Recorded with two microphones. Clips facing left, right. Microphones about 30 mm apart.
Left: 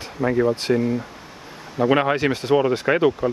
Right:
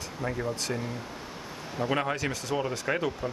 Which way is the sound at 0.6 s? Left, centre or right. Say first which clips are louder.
Left 12 dB; left.